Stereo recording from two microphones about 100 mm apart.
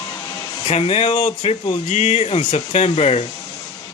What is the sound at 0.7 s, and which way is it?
Speech, 90° left.